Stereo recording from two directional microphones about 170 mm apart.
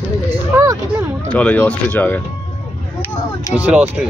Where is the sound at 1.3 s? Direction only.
10° left (ahead or behind).